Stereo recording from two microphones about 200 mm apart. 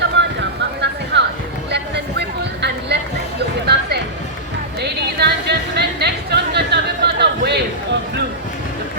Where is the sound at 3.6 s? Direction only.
55° right (ahead or behind).